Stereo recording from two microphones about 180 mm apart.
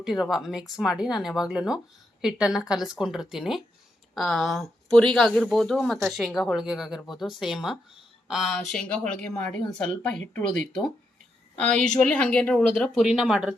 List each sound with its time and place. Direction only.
0.0 s speech: centre (ahead or behind)